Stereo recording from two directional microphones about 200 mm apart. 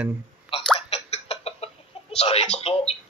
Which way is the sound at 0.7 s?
30° left (ahead or behind).